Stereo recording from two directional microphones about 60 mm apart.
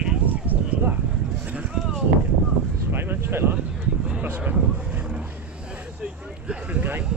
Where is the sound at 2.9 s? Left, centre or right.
Right.